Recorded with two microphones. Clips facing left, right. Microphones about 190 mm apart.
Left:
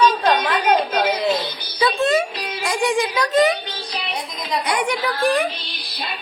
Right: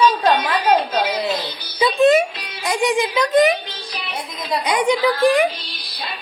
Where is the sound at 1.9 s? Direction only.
20° right (ahead or behind).